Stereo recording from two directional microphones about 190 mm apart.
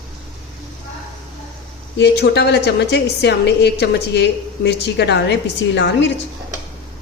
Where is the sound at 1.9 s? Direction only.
60° left (ahead or behind).